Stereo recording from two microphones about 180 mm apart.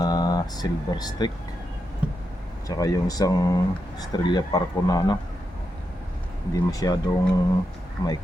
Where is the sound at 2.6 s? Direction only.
20° left (ahead or behind).